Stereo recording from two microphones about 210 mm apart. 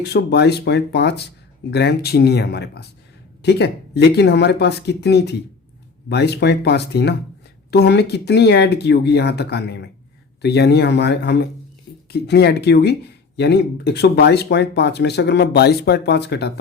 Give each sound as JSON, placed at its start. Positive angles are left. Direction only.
{"t": 0.0, "sound": "speech", "side_deg": 50}